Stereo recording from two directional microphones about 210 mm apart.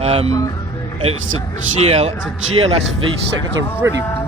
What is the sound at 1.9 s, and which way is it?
Speech, 30° right (ahead or behind).